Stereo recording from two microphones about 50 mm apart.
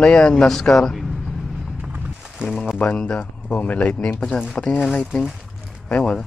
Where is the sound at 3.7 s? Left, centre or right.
Centre.